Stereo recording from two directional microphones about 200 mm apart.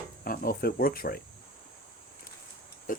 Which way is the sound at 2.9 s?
45° left (ahead or behind).